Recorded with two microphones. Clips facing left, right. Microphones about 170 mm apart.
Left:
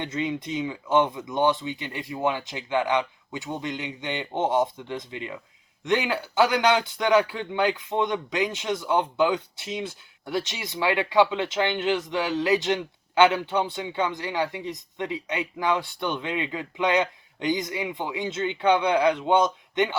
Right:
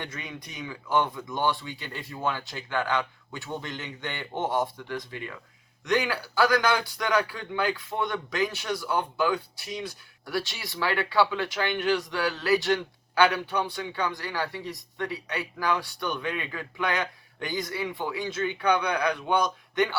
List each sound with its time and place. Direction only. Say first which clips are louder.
0.0 s a man's voice: left 10 dB; 25° left (ahead or behind)